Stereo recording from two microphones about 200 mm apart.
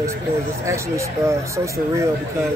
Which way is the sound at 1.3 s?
15° right (ahead or behind).